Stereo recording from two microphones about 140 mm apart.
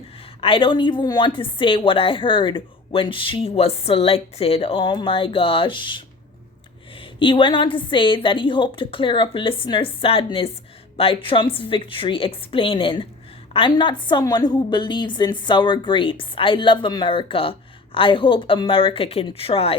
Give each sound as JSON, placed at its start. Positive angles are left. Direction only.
{"t": 0.4, "sound": "a woman's voice", "side_deg": 35}
{"t": 7.2, "sound": "a woman's voice", "side_deg": 35}